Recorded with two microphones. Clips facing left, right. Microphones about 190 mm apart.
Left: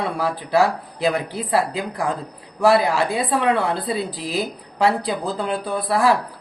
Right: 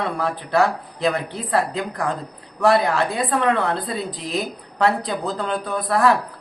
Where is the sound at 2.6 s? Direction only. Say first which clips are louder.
Left 1 dB; centre (ahead or behind).